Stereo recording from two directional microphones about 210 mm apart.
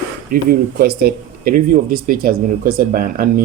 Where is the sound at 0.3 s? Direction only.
45° right (ahead or behind).